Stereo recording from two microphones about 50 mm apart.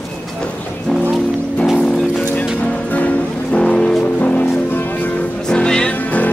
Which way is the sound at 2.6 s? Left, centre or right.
Left.